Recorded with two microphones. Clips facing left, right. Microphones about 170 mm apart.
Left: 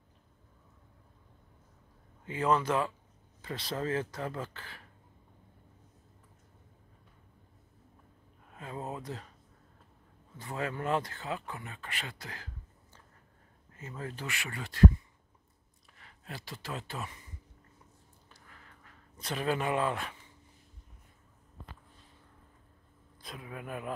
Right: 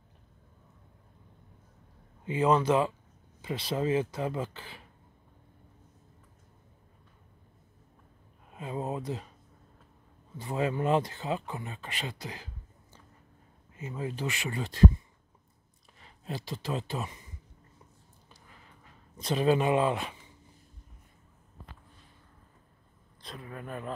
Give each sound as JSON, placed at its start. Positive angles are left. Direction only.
{"t": 2.2, "sound": "speech", "side_deg": -20}
{"t": 8.5, "sound": "a sound", "side_deg": -15}
{"t": 9.0, "sound": "speech", "side_deg": -15}
{"t": 10.4, "sound": "speech", "side_deg": -20}
{"t": 13.7, "sound": "speech", "side_deg": -15}
{"t": 16.0, "sound": "speech", "side_deg": -25}
{"t": 18.5, "sound": "a sound", "side_deg": -20}
{"t": 23.2, "sound": "speech", "side_deg": 5}